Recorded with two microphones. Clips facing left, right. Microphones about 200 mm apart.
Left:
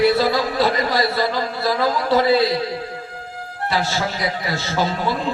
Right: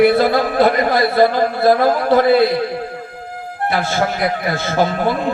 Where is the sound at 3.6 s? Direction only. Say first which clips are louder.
Right 4 dB; 55° right (ahead or behind).